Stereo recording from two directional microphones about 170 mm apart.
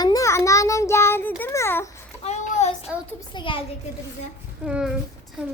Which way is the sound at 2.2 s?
40° left (ahead or behind).